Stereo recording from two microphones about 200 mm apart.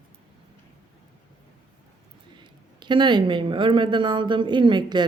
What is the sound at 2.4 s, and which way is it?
Speech, 25° right (ahead or behind).